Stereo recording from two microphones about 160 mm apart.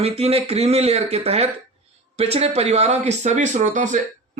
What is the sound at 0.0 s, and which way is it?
Speech, 40° right (ahead or behind).